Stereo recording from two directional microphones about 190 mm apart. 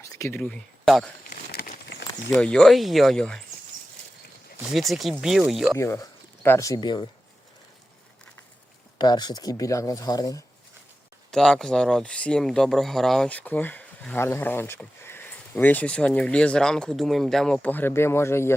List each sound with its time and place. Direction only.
0.0 s speech: 15° left (ahead or behind)
1.3 s a sound: 50° left (ahead or behind)
2.3 s speech: 5° left (ahead or behind)
4.7 s speech: centre (ahead or behind)
5.7 s speech: 15° left (ahead or behind)
9.0 s speech: 20° left (ahead or behind)
11.3 s speech: centre (ahead or behind)